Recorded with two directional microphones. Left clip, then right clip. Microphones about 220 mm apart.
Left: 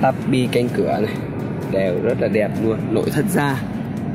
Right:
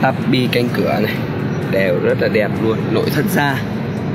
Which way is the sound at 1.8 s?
15° left (ahead or behind).